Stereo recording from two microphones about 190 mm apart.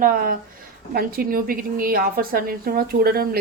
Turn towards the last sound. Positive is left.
turn(degrees=-50)  # may be behind; listen again after turning